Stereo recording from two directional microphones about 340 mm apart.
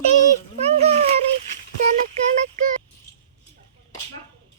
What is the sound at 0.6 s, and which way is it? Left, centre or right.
Speech, centre.